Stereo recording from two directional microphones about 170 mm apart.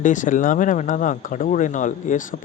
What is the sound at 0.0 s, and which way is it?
Speech, 50° left (ahead or behind).